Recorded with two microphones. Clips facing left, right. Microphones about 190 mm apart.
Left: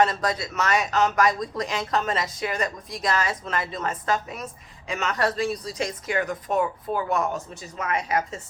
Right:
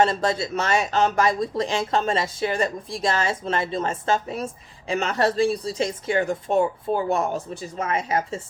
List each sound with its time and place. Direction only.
0.0 s speech: 25° right (ahead or behind)